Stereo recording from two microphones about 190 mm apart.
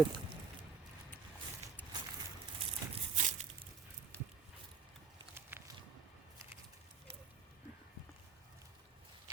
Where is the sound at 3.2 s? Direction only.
40° right (ahead or behind).